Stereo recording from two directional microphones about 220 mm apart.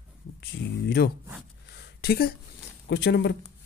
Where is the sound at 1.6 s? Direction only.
50° left (ahead or behind).